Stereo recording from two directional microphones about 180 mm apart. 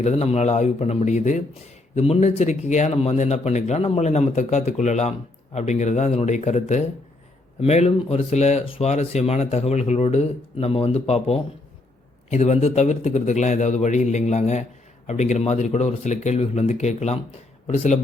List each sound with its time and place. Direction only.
0.0 s speech: 35° left (ahead or behind)